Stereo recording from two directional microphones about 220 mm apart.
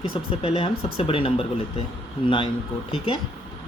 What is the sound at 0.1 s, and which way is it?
Speech, 25° left (ahead or behind).